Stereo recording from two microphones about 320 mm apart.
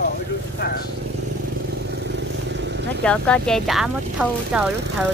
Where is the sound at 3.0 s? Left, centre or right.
Centre.